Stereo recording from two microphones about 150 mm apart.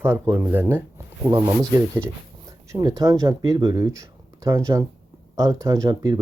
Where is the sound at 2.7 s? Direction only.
25° right (ahead or behind).